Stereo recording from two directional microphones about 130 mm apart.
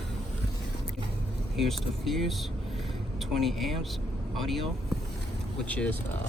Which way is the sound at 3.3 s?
Centre (ahead or behind).